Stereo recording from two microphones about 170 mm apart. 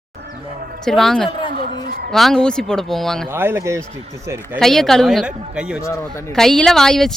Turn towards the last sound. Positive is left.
turn(degrees=0)  # may be behind; listen again after turning